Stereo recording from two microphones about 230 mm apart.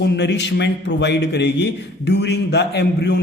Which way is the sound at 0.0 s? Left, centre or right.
Left.